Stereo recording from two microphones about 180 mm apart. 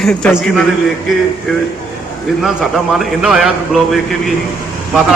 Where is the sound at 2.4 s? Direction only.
Centre (ahead or behind).